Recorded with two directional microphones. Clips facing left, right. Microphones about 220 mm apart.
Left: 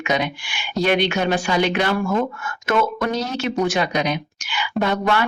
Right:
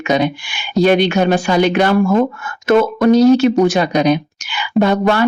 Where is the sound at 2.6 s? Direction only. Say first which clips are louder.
Right 9 dB; 35° right (ahead or behind).